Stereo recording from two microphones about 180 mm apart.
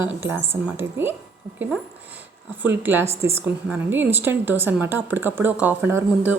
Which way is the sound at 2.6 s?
10° right (ahead or behind).